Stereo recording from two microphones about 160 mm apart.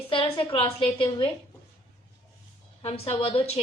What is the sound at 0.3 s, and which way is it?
Speech, 35° left (ahead or behind).